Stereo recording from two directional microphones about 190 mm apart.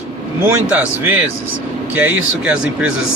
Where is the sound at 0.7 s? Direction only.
10° right (ahead or behind).